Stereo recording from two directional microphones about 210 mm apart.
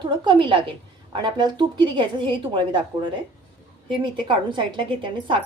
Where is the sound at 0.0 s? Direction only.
20° right (ahead or behind).